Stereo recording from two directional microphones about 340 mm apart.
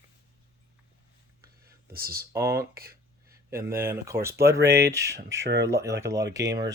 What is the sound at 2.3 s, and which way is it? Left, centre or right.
Speech, centre.